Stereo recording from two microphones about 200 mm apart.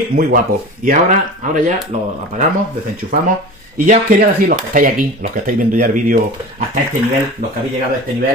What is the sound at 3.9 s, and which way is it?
Speech, 45° right (ahead or behind).